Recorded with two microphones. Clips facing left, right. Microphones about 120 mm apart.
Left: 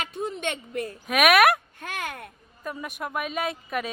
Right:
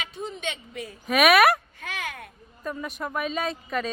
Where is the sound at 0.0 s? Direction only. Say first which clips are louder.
Left 3 dB; 55° left (ahead or behind).